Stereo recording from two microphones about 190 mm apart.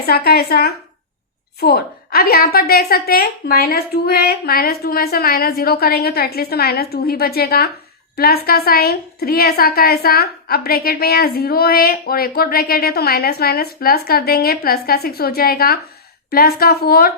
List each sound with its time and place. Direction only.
0.0 s a woman's voice: 55° left (ahead or behind)